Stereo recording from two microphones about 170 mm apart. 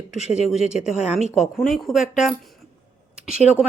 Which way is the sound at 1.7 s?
Centre (ahead or behind).